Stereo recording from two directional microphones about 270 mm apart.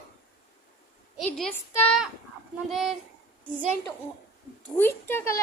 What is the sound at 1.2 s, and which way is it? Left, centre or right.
Speech, centre.